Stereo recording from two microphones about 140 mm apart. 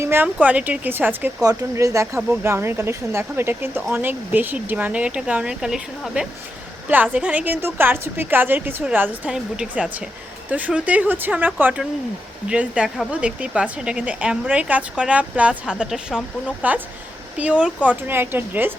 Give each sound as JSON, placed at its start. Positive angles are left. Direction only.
{"t": 0.0, "sound": "speech", "side_deg": -15}
{"t": 1.4, "sound": "speech", "side_deg": -25}